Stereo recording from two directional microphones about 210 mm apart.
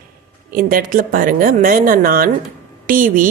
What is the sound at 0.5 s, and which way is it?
Speech, 40° right (ahead or behind).